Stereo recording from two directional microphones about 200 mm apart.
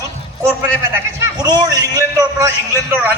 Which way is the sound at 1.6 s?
15° right (ahead or behind).